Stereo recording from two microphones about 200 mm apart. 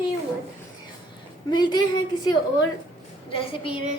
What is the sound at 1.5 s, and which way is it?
Speech, 20° left (ahead or behind).